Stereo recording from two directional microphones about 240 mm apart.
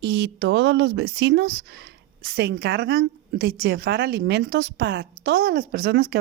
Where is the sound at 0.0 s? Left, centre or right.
Right.